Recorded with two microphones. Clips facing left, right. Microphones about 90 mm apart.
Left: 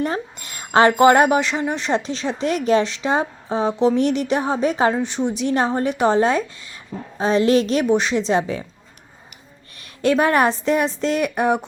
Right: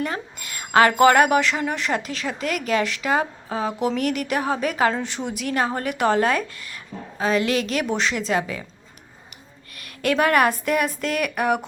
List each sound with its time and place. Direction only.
0.0 s speech: 30° left (ahead or behind)
7.9 s speech: 20° left (ahead or behind)
9.7 s speech: 25° left (ahead or behind)